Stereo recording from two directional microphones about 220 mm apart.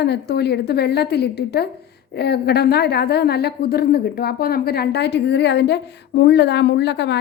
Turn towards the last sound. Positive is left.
turn(degrees=50)  # may be behind; listen again after turning